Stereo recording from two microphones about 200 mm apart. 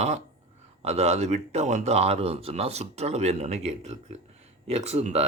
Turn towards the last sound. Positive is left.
turn(degrees=-30)  # may be behind; listen again after turning